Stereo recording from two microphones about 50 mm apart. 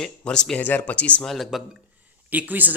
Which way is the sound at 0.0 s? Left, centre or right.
Centre.